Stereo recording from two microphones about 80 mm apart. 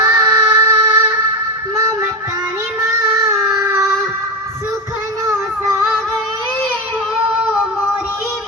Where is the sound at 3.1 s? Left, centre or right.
Right.